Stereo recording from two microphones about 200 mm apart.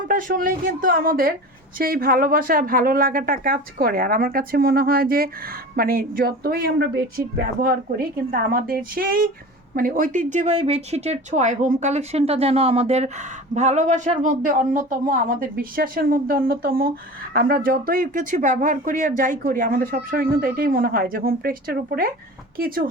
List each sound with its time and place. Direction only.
0.1 s speech: 40° right (ahead or behind)